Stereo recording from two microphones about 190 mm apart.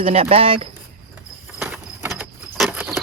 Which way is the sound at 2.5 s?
5° right (ahead or behind).